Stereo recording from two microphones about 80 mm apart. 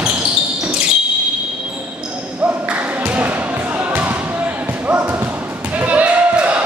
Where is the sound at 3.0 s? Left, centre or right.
Right.